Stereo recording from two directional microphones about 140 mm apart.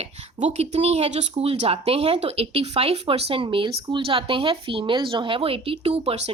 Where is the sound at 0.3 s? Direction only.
55° right (ahead or behind).